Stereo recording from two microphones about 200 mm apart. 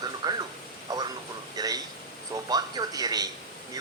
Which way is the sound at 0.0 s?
20° right (ahead or behind).